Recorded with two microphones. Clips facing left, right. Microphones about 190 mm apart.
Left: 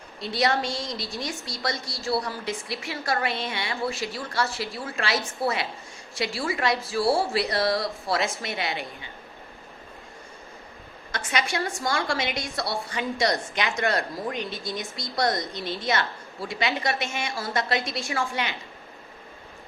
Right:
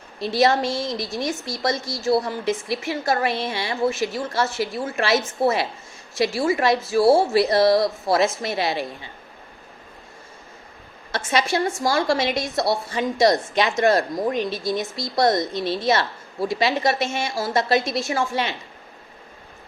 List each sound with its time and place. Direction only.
0.2 s a woman's voice: 25° right (ahead or behind)
11.1 s a woman's voice: 25° right (ahead or behind)